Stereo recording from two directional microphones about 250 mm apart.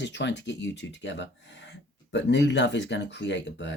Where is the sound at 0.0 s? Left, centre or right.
Left.